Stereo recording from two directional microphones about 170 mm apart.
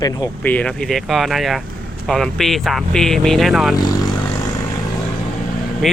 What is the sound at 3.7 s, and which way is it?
Speech, 20° left (ahead or behind).